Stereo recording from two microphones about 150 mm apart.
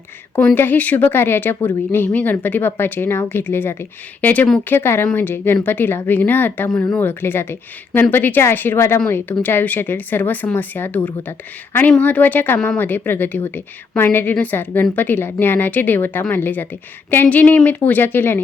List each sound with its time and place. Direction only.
0.3 s speech: 15° left (ahead or behind)